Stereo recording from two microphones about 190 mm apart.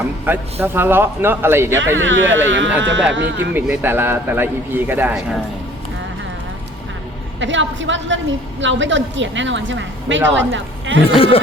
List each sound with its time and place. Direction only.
0.6 s a man's voice: 10° right (ahead or behind)
2.0 s a woman's voice: 80° right
3.5 s a man's voice: 10° right (ahead or behind)
7.3 s a woman's voice: 75° right (ahead or behind)
11.0 s speech: 30° left (ahead or behind)